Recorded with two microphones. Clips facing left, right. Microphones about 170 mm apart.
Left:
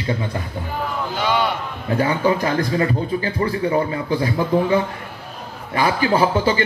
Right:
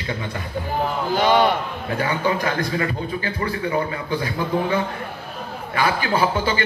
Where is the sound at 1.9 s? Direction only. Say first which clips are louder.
Left 4 dB; 30° left (ahead or behind).